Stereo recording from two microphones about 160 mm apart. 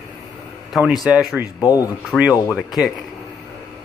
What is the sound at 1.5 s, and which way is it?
Speech, 20° left (ahead or behind).